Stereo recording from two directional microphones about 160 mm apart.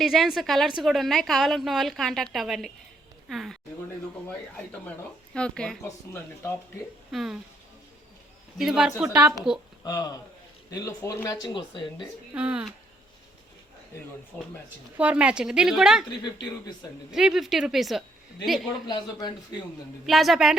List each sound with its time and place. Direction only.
0.0 s a woman's voice: centre (ahead or behind)
5.3 s a woman's voice: 5° left (ahead or behind)
6.1 s speech: 15° left (ahead or behind)
7.1 s a woman's voice: centre (ahead or behind)
8.5 s a woman's voice: 5° right (ahead or behind)
9.8 s speech: 25° left (ahead or behind)
12.3 s speech: 5° right (ahead or behind)
14.9 s a woman's voice: 10° right (ahead or behind)
16.0 s speech: 25° left (ahead or behind)
17.1 s a woman's voice: 5° right (ahead or behind)
18.9 s speech: 25° left (ahead or behind)
20.1 s a woman's voice: centre (ahead or behind)